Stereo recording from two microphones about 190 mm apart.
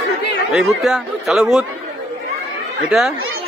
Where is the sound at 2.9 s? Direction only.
Centre (ahead or behind).